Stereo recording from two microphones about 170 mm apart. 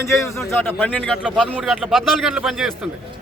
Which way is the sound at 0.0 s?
15° left (ahead or behind).